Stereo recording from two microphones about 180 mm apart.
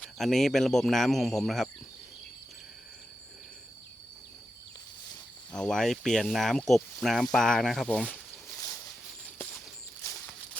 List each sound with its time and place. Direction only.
0.0 s speech: centre (ahead or behind)
5.5 s speech: 5° left (ahead or behind)
8.4 s a sound: 15° left (ahead or behind)